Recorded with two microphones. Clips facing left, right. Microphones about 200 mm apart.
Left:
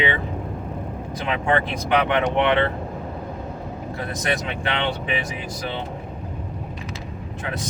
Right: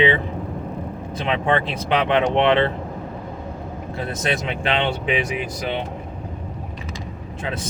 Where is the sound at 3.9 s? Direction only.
25° right (ahead or behind).